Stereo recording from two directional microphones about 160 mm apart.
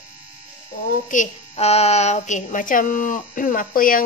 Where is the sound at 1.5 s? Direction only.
40° left (ahead or behind); by 4.0 s 60° left (ahead or behind).